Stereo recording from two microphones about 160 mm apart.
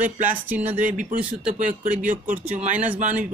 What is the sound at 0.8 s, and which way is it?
Speech, 55° right (ahead or behind).